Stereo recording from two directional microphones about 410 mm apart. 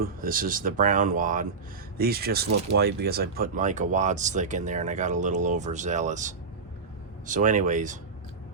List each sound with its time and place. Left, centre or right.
0.0 s speech: centre